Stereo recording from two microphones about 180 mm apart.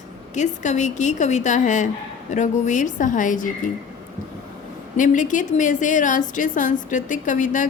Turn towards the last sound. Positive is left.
turn(degrees=45)  # may be behind; listen again after turning